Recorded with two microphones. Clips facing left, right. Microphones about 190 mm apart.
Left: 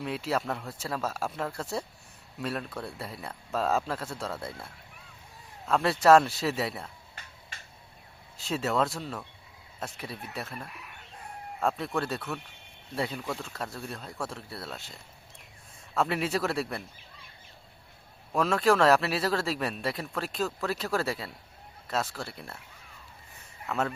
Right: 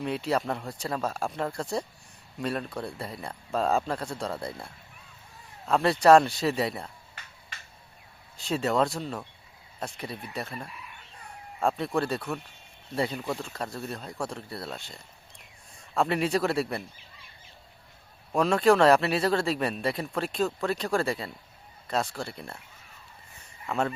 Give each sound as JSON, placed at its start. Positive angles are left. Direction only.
{"t": 0.0, "sound": "speech", "side_deg": 0}
{"t": 5.7, "sound": "speech", "side_deg": 0}
{"t": 8.4, "sound": "speech", "side_deg": 0}
{"t": 10.7, "sound": "chicken", "side_deg": 65}
{"t": 11.9, "sound": "speech", "side_deg": 0}
{"t": 16.0, "sound": "speech", "side_deg": 0}
{"t": 18.3, "sound": "speech", "side_deg": 0}
{"t": 23.6, "sound": "speech", "side_deg": 0}